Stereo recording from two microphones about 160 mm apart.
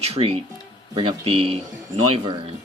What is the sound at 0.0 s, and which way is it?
Speech, 40° right (ahead or behind).